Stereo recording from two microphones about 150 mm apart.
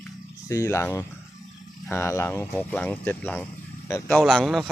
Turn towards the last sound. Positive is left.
turn(degrees=0)  # may be behind; listen again after turning